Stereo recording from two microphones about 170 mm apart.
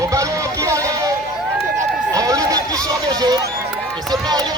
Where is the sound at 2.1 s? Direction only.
20° right (ahead or behind).